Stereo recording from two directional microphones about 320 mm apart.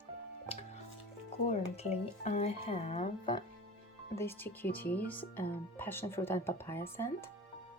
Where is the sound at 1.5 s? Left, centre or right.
Centre.